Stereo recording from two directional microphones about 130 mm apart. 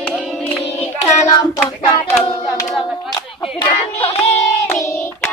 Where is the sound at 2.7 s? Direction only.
Centre (ahead or behind).